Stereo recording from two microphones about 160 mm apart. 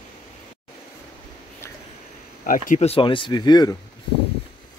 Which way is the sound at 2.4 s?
55° left (ahead or behind).